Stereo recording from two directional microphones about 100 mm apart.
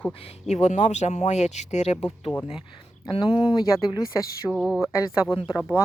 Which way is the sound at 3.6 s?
35° left (ahead or behind).